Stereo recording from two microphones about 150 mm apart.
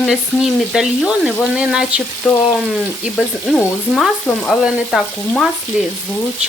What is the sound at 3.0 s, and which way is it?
Frying, centre (ahead or behind).